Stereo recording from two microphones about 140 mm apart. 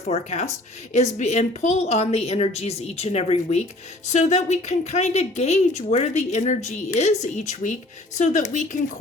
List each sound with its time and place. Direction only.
0.0 s a woman's voice: 50° left (ahead or behind)